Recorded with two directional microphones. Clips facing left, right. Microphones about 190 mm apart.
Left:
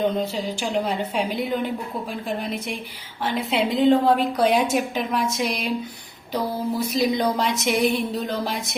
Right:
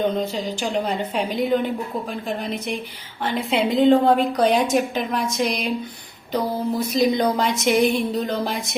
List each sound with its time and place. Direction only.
0.6 s a woman's voice: centre (ahead or behind)
3.2 s a woman's voice: centre (ahead or behind)